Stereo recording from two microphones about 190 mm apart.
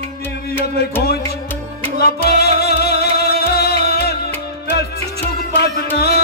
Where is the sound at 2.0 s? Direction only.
55° left (ahead or behind).